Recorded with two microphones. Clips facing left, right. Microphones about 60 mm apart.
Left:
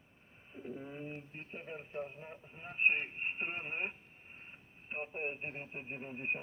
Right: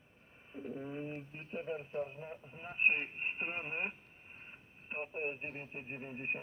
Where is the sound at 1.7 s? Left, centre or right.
Centre.